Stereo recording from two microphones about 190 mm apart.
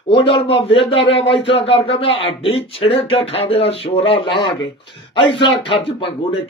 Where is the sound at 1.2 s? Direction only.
70° left (ahead or behind).